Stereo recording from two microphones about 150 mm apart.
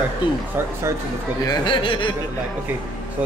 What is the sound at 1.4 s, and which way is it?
Speech, 30° left (ahead or behind).